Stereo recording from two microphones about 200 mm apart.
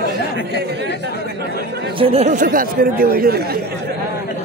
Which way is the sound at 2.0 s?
30° right (ahead or behind).